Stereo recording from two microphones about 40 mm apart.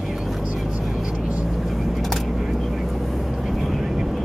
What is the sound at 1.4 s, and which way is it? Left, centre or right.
Vehicle, centre.